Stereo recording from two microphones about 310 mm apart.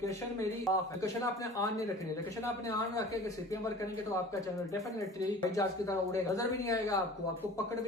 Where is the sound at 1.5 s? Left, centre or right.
Centre.